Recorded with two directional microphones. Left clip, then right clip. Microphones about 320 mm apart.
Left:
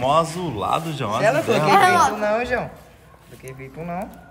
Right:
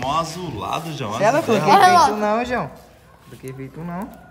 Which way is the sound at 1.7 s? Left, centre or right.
Right.